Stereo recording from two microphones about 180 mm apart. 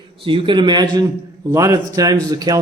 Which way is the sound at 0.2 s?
30° right (ahead or behind).